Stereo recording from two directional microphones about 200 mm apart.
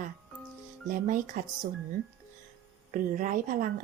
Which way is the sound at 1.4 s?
40° right (ahead or behind).